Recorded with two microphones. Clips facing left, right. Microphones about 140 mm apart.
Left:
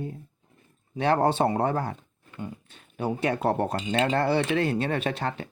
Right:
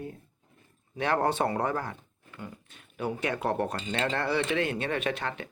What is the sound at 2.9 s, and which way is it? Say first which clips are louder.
Speech: left 4 dB; 35° left (ahead or behind).